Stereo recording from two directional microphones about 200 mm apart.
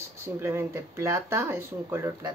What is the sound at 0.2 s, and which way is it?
Speech, 10° right (ahead or behind).